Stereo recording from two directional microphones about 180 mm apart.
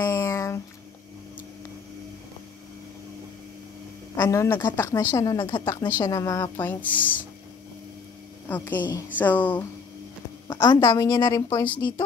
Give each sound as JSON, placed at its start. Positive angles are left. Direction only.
{"t": 0.0, "sound": "a sound", "side_deg": 15}
{"t": 4.2, "sound": "a woman's voice", "side_deg": 15}
{"t": 8.5, "sound": "a woman's voice", "side_deg": 10}